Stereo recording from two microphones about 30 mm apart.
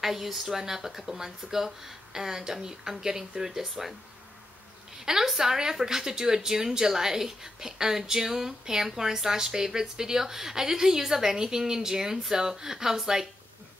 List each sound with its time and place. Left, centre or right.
0.0 s a woman's voice: centre
5.0 s a woman's voice: centre